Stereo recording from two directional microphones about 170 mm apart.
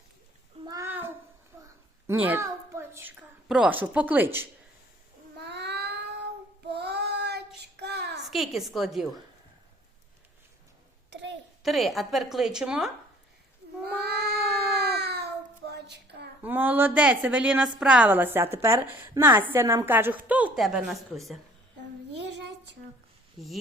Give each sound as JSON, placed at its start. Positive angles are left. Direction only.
{"t": 0.6, "sound": "a sound", "side_deg": -20}
{"t": 3.5, "sound": "a woman's voice", "side_deg": -5}
{"t": 5.4, "sound": "cat", "side_deg": -80}
{"t": 6.7, "sound": "child singing", "side_deg": -75}
{"t": 8.2, "sound": "a woman's voice", "side_deg": 0}
{"t": 11.1, "sound": "a sound", "side_deg": -90}
{"t": 11.6, "sound": "a woman's voice", "side_deg": 0}
{"t": 14.0, "sound": "cat", "side_deg": -70}
{"t": 16.4, "sound": "a woman's voice", "side_deg": -10}
{"t": 22.3, "sound": "a sound", "side_deg": -90}
{"t": 23.4, "sound": "a woman's voice", "side_deg": 0}